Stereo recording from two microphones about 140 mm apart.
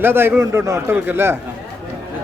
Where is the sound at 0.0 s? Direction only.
15° right (ahead or behind).